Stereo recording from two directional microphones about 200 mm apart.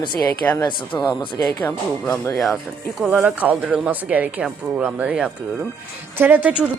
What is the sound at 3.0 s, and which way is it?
Speech, 5° right (ahead or behind).